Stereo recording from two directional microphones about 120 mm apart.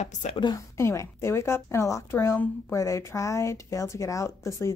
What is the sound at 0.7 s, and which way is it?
Speech, 25° left (ahead or behind).